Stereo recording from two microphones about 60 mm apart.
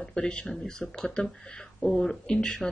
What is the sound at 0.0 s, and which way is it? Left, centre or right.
Speech, centre.